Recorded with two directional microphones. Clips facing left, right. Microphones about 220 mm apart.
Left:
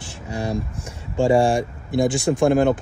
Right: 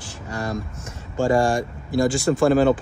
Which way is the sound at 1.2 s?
30° left (ahead or behind).